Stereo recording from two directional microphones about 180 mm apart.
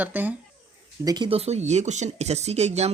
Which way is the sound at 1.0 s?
25° right (ahead or behind).